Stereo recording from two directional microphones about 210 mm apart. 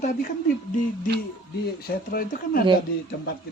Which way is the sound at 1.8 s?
45° left (ahead or behind).